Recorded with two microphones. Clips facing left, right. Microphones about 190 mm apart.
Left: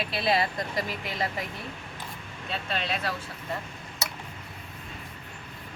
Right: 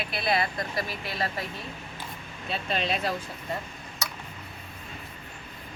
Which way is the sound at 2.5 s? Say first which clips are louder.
Right 3 dB; 15° right (ahead or behind).